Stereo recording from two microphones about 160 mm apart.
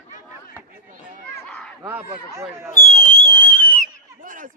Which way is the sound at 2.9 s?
35° right (ahead or behind).